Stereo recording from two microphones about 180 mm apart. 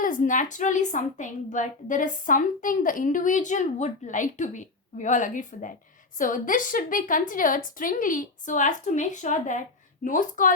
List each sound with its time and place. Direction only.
0.0 s a woman's voice: 45° left (ahead or behind)